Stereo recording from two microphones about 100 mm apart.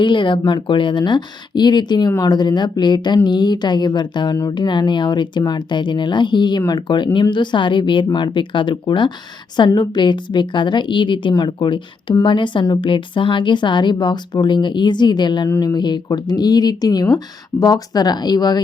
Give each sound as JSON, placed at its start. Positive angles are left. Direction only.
{"t": 0.0, "sound": "speech", "side_deg": 55}